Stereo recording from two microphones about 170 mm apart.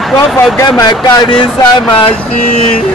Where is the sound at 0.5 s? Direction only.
20° left (ahead or behind).